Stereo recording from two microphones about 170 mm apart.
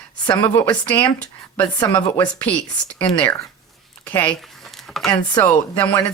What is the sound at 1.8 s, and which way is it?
Speech, 25° left (ahead or behind).